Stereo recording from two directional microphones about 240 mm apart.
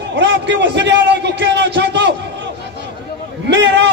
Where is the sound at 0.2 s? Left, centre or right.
Right.